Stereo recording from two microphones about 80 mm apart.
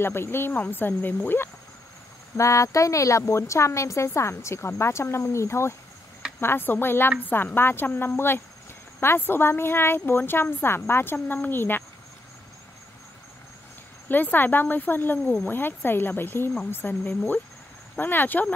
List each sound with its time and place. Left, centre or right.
0.0 s speech: left
2.3 s a woman's voice: left
14.0 s speech: left